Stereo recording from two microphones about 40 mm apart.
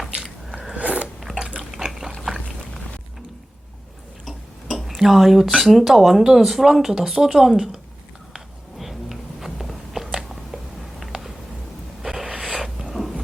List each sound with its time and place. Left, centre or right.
0.8 s biting: right
1.0 s biting: centre
2.2 s a sound: centre
4.3 s speech: centre
8.8 s biting: centre
11.0 s a sound: centre
12.9 s vehicle: centre